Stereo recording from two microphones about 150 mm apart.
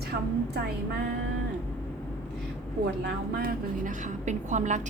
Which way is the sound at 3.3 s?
65° right (ahead or behind).